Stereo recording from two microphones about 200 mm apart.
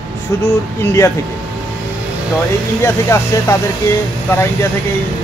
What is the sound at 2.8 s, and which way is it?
Speech, 15° left (ahead or behind).